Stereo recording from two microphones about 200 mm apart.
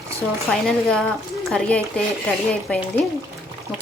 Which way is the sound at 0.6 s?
5° left (ahead or behind).